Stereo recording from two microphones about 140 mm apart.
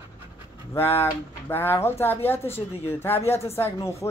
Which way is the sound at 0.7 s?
15° left (ahead or behind).